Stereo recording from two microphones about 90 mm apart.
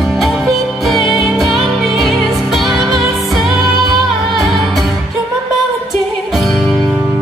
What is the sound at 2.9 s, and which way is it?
Music, 40° right (ahead or behind).